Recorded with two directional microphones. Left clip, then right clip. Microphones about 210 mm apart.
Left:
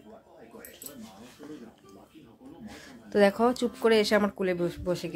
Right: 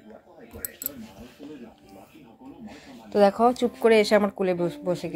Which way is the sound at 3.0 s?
Centre (ahead or behind).